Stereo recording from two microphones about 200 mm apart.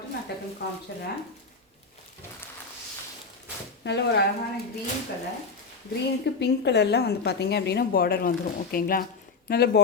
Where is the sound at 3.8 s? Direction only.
60° left (ahead or behind).